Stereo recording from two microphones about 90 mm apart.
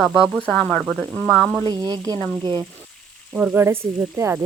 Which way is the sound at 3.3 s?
20° right (ahead or behind).